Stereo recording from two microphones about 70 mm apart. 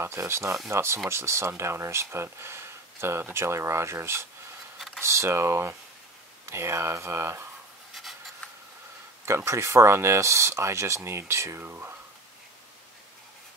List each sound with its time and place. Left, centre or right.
0.0 s speech: right
4.7 s a sound: centre
5.0 s speech: right
7.9 s writing: centre
9.2 s speech: right